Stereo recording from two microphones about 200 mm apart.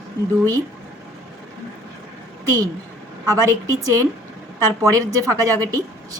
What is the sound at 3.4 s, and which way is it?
A woman's voice, 15° right (ahead or behind).